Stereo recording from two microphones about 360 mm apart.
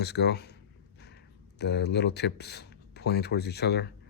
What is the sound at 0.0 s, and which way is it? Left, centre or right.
Speech, left.